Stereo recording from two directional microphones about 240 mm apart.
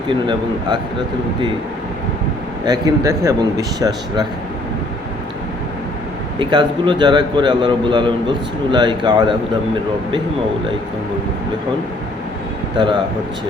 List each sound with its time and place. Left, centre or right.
0.1 s a man's voice: centre
2.6 s speech: centre
6.4 s a man's voice: centre
12.7 s a man's voice: centre